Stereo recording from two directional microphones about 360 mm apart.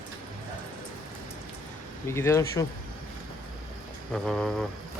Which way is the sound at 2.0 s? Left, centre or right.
Centre.